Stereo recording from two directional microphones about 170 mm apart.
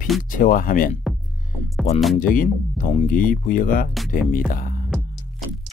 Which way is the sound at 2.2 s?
55° left (ahead or behind).